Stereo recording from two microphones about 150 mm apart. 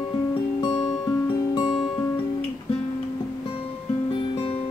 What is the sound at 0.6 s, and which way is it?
Music, 30° left (ahead or behind).